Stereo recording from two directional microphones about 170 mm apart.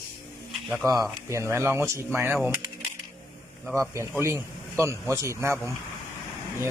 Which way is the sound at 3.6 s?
15° right (ahead or behind).